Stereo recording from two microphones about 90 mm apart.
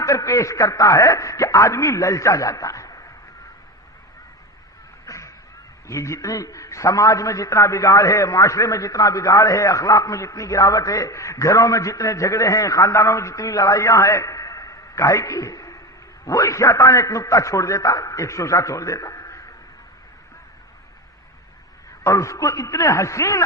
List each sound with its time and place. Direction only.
0.0 s a man's voice: 40° left (ahead or behind)
5.0 s a sound: 35° left (ahead or behind)
5.9 s a man's voice: 35° left (ahead or behind)
22.0 s a man's voice: 35° left (ahead or behind)